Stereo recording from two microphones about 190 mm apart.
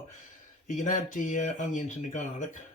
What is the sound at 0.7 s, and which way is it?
Speech, 45° left (ahead or behind).